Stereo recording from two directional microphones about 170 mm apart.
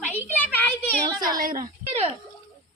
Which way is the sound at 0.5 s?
10° left (ahead or behind).